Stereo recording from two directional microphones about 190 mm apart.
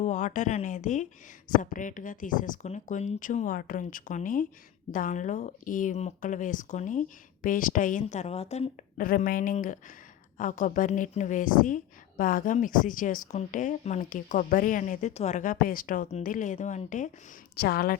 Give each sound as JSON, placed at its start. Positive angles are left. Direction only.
{"t": 0.0, "sound": "a woman's voice", "side_deg": 40}
{"t": 17.6, "sound": "a woman's voice", "side_deg": 55}